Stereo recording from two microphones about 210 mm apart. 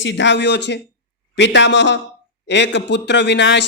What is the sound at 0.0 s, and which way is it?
Speech, 60° left (ahead or behind).